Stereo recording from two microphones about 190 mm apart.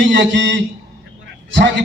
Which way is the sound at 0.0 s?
75° right (ahead or behind).